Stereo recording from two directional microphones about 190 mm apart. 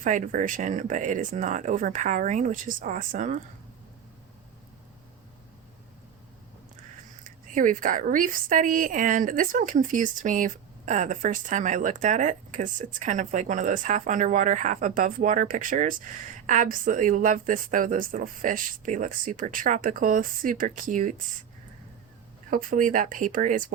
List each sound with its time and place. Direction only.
0.0 s a woman's voice: 45° right (ahead or behind)
7.3 s a woman's voice: 45° right (ahead or behind)
22.4 s a woman's voice: 45° right (ahead or behind)